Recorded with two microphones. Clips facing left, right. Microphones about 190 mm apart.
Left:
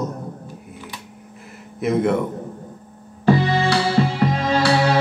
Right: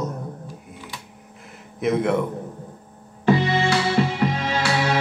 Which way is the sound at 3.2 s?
35° left (ahead or behind).